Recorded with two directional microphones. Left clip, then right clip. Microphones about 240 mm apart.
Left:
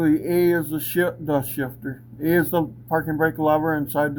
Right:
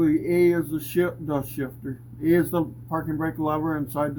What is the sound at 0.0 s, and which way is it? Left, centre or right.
Speech, left.